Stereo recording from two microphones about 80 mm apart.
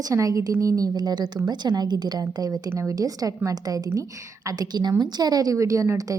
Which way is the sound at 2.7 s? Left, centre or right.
Right.